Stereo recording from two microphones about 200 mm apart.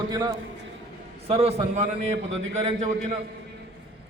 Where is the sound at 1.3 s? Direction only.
30° right (ahead or behind).